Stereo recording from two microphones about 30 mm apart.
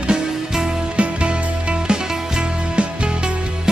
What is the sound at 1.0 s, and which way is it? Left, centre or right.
Music, right.